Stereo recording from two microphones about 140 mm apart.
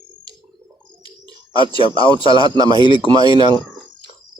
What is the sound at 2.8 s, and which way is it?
Speech, 35° left (ahead or behind).